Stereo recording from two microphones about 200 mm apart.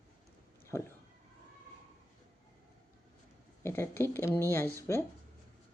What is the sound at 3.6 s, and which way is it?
Speech, 10° left (ahead or behind).